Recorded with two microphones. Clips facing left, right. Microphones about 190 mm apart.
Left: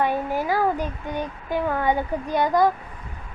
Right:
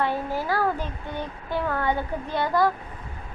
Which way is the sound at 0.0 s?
15° left (ahead or behind).